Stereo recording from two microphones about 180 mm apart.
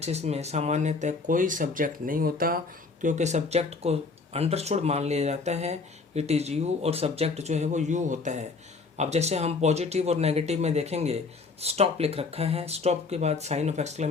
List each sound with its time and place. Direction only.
0.0 s speech: 35° right (ahead or behind); by 2.6 s 50° right (ahead or behind)
3.0 s speech: 40° right (ahead or behind)